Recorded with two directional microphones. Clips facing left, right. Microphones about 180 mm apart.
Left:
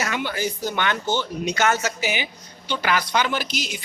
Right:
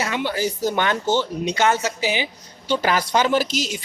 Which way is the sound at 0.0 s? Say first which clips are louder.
Right 3 dB; 25° right (ahead or behind).